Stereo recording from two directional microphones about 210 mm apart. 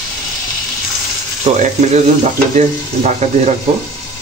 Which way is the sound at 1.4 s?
35° right (ahead or behind).